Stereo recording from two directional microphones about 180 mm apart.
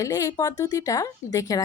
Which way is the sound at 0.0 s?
20° left (ahead or behind).